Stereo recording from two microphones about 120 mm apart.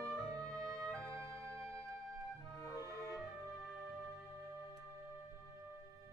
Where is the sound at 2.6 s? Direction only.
25° left (ahead or behind).